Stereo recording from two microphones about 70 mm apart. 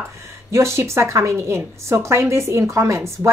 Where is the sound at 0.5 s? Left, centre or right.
Right.